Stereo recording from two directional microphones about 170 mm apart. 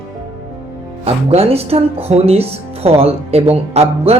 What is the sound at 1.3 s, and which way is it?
Speech, 35° right (ahead or behind).